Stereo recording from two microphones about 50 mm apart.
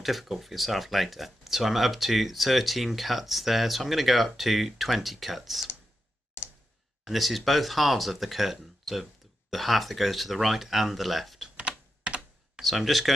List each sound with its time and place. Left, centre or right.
0.0 s speech: centre
7.1 s speech: centre
11.4 s typing: right
12.5 s speech: centre